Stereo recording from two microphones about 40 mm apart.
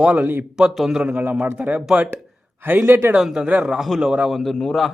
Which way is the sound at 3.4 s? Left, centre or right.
Right.